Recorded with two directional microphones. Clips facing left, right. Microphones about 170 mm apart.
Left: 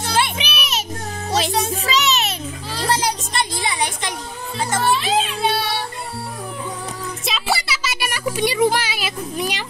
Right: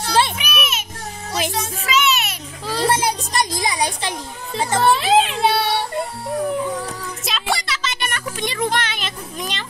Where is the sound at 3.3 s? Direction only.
40° right (ahead or behind).